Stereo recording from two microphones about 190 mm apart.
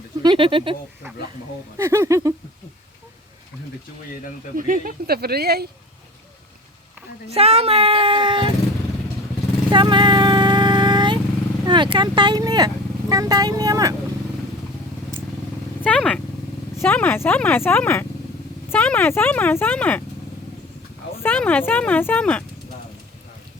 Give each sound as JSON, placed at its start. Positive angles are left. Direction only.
{"t": 0.2, "sound": "speech", "side_deg": -25}
{"t": 1.8, "sound": "a sound", "side_deg": -15}
{"t": 4.5, "sound": "speech", "side_deg": -45}
{"t": 7.3, "sound": "speech", "side_deg": -30}
{"t": 9.6, "sound": "vehicle", "side_deg": -25}
{"t": 11.6, "sound": "speech", "side_deg": -25}
{"t": 15.8, "sound": "speech", "side_deg": 5}
{"t": 21.2, "sound": "speech", "side_deg": 10}